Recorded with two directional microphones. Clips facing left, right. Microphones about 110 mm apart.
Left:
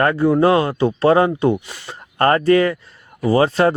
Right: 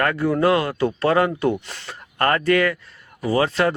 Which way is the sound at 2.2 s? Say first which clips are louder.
Left 4 dB; 30° left (ahead or behind).